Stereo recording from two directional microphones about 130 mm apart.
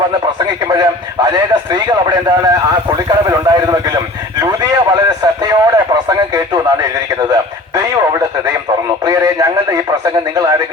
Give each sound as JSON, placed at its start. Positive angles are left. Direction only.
{"t": 0.3, "sound": "speech", "side_deg": -35}
{"t": 9.0, "sound": "radio", "side_deg": -25}